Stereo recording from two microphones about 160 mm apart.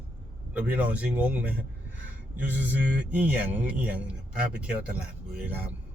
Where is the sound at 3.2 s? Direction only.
10° right (ahead or behind).